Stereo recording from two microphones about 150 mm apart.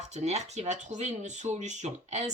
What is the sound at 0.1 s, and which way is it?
Speech, 45° right (ahead or behind).